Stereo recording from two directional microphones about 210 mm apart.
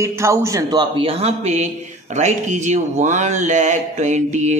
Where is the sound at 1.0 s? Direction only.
30° right (ahead or behind).